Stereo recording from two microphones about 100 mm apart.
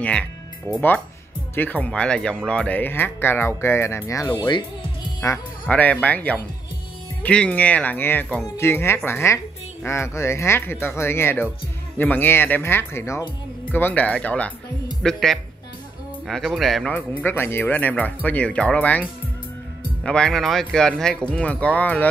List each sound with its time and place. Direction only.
0.0 s speech: 10° left (ahead or behind); by 4.3 s 30° left (ahead or behind)
4.3 s speech: 55° left (ahead or behind)
5.2 s speech: 35° left (ahead or behind)
5.7 s speech: 15° left (ahead or behind)
16.9 s speech: 20° left (ahead or behind)